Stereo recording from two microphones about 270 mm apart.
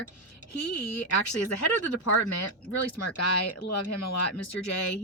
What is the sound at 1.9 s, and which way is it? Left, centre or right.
Speech, left.